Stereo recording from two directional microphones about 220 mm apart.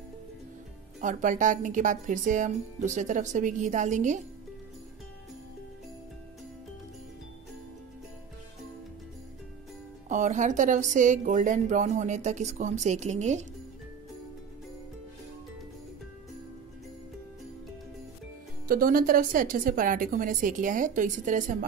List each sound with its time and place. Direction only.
1.0 s a woman's voice: 35° right (ahead or behind)
10.0 s a woman's voice: 35° right (ahead or behind)
18.7 s a woman's voice: 40° right (ahead or behind)